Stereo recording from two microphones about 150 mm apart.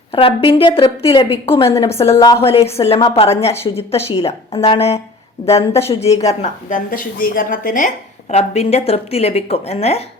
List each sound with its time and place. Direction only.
0.1 s a woman's voice: 40° left (ahead or behind)
2.1 s a woman's voice: 20° left (ahead or behind)
2.4 s a woman's voice: 40° left (ahead or behind); by 7.9 s 65° left (ahead or behind)
8.3 s a woman's voice: 45° left (ahead or behind)